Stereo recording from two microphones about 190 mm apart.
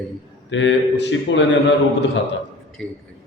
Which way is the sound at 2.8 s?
Centre (ahead or behind).